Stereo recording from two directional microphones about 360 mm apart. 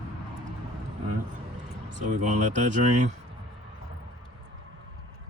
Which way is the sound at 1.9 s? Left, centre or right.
Right.